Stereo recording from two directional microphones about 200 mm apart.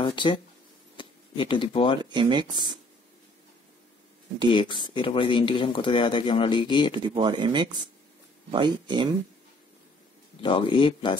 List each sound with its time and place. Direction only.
0.0 s speech: 25° left (ahead or behind)
0.9 s a sound: 25° left (ahead or behind)
2.1 s speech: 25° right (ahead or behind)
4.5 s speech: 25° left (ahead or behind)
7.0 s speech: 25° right (ahead or behind)
10.4 s speech: 25° left (ahead or behind)